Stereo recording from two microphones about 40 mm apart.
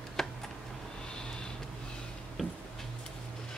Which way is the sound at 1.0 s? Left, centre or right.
Left.